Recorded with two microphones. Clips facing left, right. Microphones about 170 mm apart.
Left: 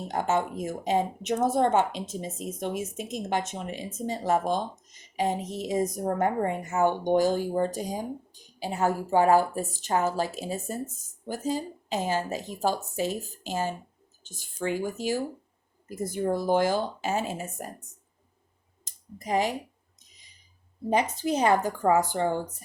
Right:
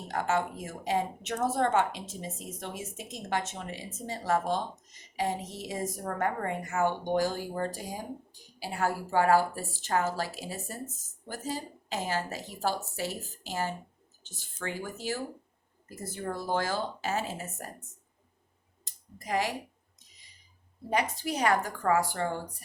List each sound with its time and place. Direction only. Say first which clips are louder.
0.1 s a woman's voice: left 2 dB; 20° left (ahead or behind)
18.9 s speech: left 4 dB; 20° left (ahead or behind)
20.9 s speech: left 5 dB; 20° left (ahead or behind)